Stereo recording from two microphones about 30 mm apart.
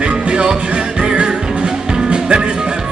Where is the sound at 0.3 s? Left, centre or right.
Right.